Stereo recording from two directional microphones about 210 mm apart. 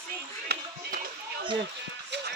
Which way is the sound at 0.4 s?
45° right (ahead or behind).